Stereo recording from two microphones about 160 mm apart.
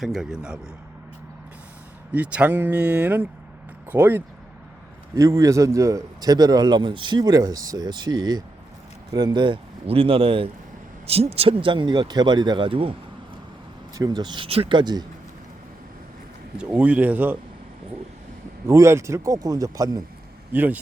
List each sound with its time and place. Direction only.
0.0 s a man's voice: centre (ahead or behind)
2.1 s a man's voice: 10° right (ahead or behind); by 12.9 s 35° right (ahead or behind)
13.9 s a man's voice: 25° right (ahead or behind)
16.6 s speech: 10° right (ahead or behind)
18.6 s a man's voice: 15° right (ahead or behind)
20.5 s speech: 10° right (ahead or behind)